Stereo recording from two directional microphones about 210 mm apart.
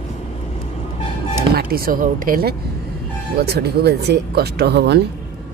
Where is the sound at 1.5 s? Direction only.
45° right (ahead or behind).